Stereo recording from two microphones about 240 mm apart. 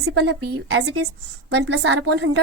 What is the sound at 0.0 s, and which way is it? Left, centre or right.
Speech, right.